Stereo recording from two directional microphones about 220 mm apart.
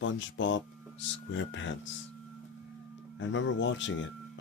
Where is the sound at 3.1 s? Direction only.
55° left (ahead or behind).